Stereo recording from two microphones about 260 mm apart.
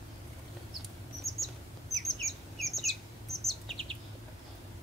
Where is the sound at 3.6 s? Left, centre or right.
Right.